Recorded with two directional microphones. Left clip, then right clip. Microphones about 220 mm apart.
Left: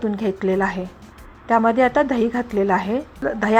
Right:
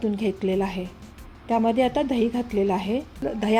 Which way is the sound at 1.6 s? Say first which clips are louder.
Left 5 dB; 35° left (ahead or behind).